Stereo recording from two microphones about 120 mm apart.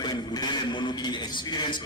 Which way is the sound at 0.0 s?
35° left (ahead or behind).